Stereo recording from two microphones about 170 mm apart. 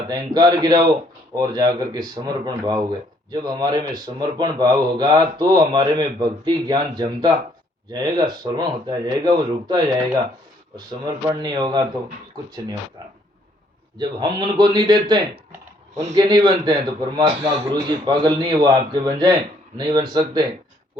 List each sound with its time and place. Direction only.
0.1 s a man's voice: 25° right (ahead or behind)
14.0 s a man's voice: 25° right (ahead or behind)